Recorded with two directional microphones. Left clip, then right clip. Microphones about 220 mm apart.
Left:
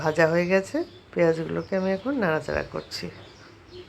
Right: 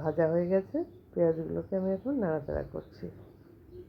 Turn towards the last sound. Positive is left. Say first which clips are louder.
# left 8 dB
turn(degrees=20)  # may be behind; listen again after turning